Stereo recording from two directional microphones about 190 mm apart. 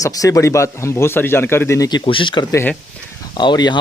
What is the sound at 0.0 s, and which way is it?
Speech, 15° left (ahead or behind).